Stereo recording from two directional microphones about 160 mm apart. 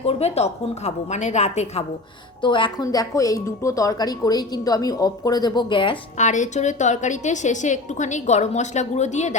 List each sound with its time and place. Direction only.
0.0 s a woman's voice: 40° left (ahead or behind)
2.4 s a woman's voice: 30° left (ahead or behind)
6.1 s a woman's voice: 50° left (ahead or behind)